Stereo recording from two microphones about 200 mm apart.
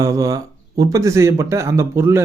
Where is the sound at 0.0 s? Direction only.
15° right (ahead or behind).